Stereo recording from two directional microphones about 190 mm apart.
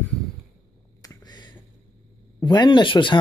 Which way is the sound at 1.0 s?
20° left (ahead or behind).